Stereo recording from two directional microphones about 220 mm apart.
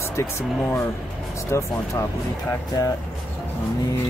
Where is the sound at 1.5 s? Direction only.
15° left (ahead or behind).